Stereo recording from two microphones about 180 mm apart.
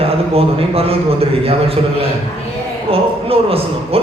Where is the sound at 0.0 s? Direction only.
35° right (ahead or behind).